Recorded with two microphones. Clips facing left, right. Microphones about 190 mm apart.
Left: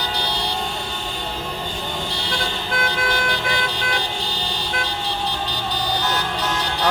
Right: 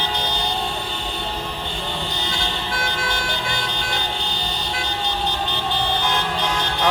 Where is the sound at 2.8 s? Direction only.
55° left (ahead or behind).